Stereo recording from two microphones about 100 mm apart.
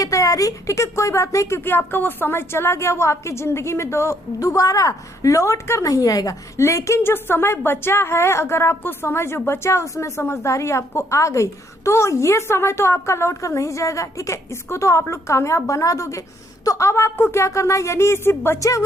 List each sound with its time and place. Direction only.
0.0 s speech: 35° left (ahead or behind)